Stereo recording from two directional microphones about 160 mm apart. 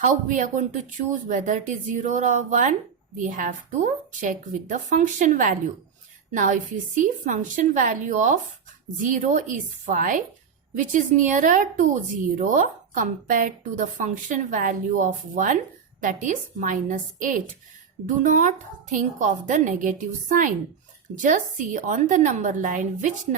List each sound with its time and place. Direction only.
0.0 s speech: 55° right (ahead or behind)